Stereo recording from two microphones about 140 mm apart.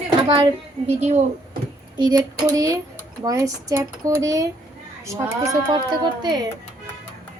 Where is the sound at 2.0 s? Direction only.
30° right (ahead or behind).